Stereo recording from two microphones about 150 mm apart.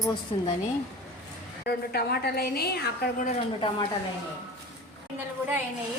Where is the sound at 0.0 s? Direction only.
30° left (ahead or behind).